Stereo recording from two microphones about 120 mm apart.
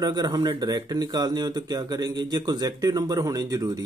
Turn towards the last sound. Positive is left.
turn(degrees=-30)  # may be behind; listen again after turning